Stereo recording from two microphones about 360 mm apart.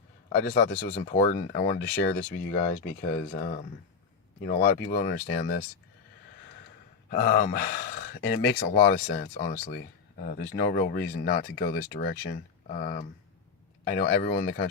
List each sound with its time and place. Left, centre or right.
0.5 s speech: left
7.1 s speech: left